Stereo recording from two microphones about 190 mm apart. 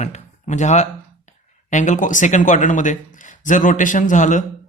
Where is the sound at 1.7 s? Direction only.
40° left (ahead or behind).